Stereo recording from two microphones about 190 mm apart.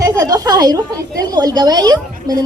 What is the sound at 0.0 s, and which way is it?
A woman's voice, 15° right (ahead or behind).